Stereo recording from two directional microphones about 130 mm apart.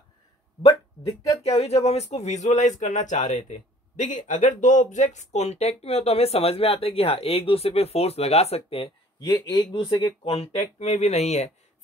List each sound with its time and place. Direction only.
1.4 s speech: 55° left (ahead or behind)
9.3 s speech: 25° left (ahead or behind)
10.2 s speech: 45° left (ahead or behind)
10.8 s speech: 60° left (ahead or behind)